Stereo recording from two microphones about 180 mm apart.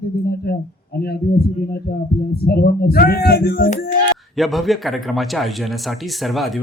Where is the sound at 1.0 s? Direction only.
60° left (ahead or behind).